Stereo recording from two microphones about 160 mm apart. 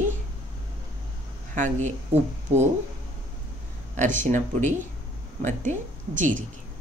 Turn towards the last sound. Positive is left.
turn(degrees=-50)  # may be behind; listen again after turning